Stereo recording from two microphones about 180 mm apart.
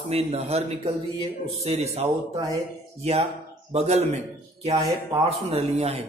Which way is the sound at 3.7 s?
35° right (ahead or behind).